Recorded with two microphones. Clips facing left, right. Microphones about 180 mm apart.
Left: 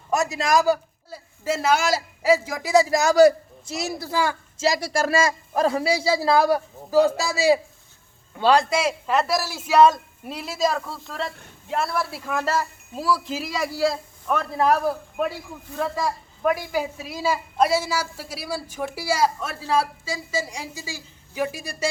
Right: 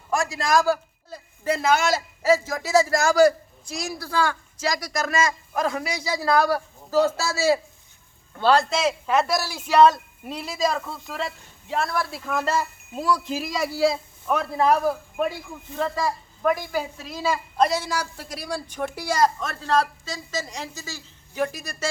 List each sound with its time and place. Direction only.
0.1 s a man's voice: 20° left (ahead or behind)
0.7 s a man's voice: 5° left (ahead or behind)